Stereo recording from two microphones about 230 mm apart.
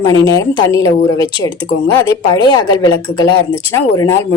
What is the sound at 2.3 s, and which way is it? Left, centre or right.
A woman's voice, centre.